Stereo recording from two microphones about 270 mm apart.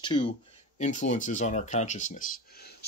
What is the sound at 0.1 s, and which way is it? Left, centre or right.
Speech, centre.